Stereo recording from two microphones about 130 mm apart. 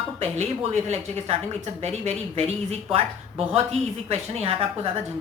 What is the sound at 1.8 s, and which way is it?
A woman's voice, 55° right (ahead or behind).